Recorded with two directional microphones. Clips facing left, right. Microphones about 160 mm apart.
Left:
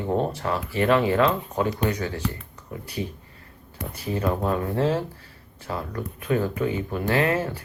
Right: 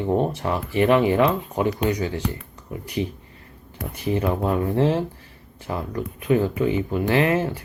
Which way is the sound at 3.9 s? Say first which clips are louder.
Right 3 dB; 15° right (ahead or behind).